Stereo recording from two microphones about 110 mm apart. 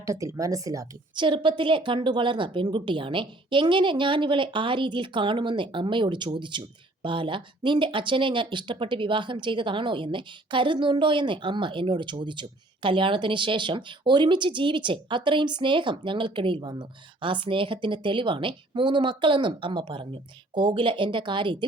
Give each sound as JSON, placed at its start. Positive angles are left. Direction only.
{"t": 0.0, "sound": "speech", "side_deg": -30}
{"t": 1.1, "sound": "speech", "side_deg": -45}